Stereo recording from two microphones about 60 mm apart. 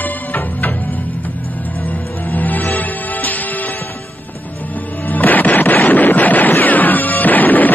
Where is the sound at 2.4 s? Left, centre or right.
Left.